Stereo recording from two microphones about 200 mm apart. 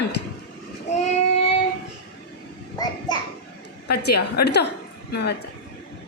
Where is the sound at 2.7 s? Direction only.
20° left (ahead or behind).